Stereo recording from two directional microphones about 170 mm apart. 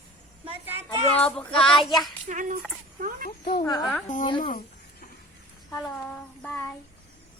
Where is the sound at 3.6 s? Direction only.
25° left (ahead or behind).